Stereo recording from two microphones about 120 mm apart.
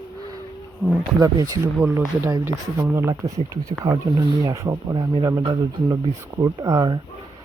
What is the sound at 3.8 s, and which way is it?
Speech, 35° right (ahead or behind).